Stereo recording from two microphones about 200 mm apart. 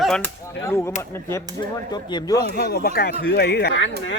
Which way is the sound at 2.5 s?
50° left (ahead or behind).